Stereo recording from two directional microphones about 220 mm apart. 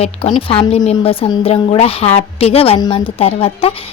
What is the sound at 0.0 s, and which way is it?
A woman's voice, 25° left (ahead or behind).